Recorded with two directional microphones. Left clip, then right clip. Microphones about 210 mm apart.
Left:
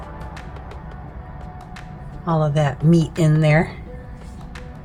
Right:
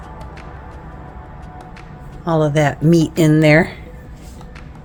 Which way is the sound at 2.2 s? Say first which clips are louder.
Right 5 dB; 40° right (ahead or behind).